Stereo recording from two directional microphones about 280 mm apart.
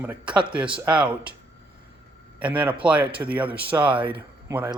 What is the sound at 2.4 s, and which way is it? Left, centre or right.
Speech, centre.